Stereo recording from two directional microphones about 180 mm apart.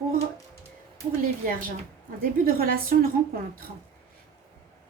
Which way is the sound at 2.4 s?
55° right (ahead or behind).